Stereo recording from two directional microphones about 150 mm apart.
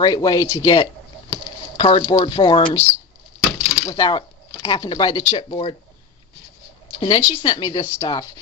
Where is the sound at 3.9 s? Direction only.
30° left (ahead or behind).